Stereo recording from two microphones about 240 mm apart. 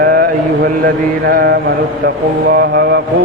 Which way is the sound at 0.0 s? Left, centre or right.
Right.